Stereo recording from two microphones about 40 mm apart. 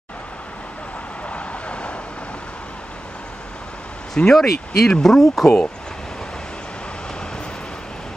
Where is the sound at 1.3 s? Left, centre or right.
Left.